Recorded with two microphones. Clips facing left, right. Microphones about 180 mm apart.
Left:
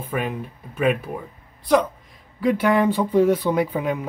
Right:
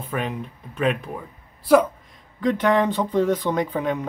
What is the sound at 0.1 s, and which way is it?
Speech, 5° left (ahead or behind).